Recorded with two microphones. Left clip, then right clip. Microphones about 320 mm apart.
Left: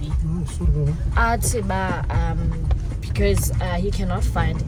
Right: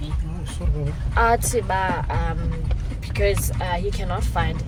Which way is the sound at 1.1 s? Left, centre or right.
Centre.